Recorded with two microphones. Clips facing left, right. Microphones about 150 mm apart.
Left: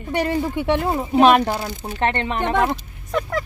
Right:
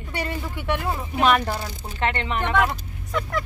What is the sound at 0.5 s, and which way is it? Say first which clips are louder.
Speech: left 6 dB; 25° left (ahead or behind).